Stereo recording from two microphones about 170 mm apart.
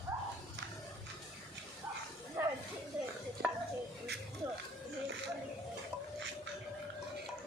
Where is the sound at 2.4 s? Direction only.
10° right (ahead or behind).